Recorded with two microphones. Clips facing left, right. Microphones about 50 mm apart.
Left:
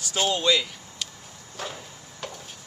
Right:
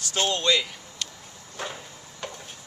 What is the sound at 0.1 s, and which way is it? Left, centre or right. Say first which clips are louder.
Speech: left 1 dB; centre.